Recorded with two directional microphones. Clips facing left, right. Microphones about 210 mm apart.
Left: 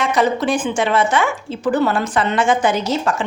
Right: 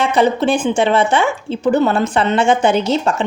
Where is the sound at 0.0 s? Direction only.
30° right (ahead or behind).